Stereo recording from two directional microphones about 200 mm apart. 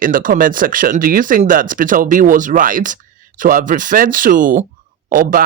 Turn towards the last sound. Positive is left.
turn(degrees=-45)  # may be behind; listen again after turning